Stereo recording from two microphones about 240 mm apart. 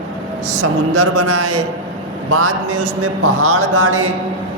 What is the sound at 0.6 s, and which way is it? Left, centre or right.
A man's voice, right.